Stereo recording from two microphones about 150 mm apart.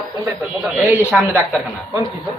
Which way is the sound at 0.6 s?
Centre (ahead or behind).